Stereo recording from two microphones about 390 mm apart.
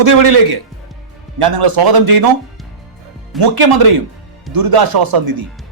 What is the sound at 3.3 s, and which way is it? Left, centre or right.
A man's voice, right.